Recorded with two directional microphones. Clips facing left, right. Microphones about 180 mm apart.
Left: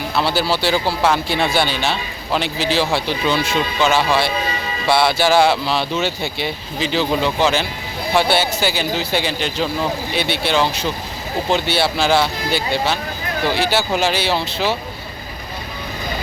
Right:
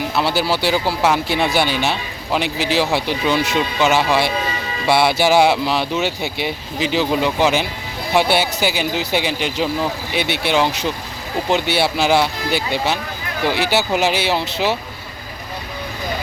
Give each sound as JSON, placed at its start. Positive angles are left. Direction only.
{"t": 0.2, "sound": "speech", "side_deg": -15}